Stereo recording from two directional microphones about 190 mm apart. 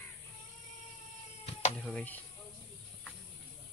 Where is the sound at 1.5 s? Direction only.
35° left (ahead or behind).